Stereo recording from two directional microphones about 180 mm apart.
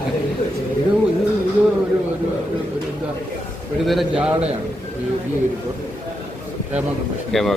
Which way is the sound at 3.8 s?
Centre (ahead or behind).